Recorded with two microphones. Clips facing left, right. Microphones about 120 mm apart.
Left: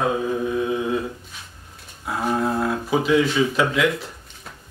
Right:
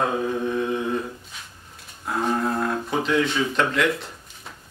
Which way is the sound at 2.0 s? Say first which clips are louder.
Left 1 dB; 5° left (ahead or behind).